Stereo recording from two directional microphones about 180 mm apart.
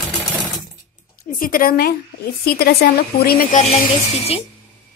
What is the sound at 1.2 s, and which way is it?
A woman's voice, 50° left (ahead or behind).